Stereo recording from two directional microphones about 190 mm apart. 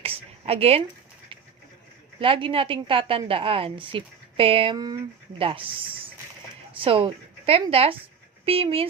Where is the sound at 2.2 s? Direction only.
30° right (ahead or behind).